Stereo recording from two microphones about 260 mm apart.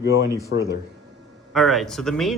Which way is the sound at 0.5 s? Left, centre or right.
Left.